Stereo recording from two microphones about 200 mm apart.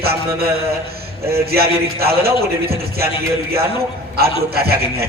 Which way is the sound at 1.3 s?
50° right (ahead or behind).